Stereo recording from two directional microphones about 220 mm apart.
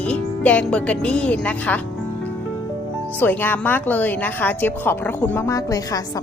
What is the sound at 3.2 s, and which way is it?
A woman's voice, 10° left (ahead or behind).